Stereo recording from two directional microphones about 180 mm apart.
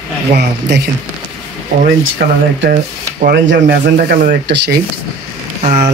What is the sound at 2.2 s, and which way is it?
Speech, 70° right (ahead or behind).